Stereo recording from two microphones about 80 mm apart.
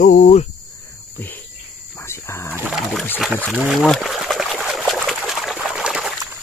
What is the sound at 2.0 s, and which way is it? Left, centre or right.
Wild animals, left.